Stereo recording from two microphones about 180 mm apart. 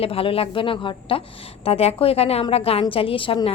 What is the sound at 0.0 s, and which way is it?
A woman's voice, 30° left (ahead or behind).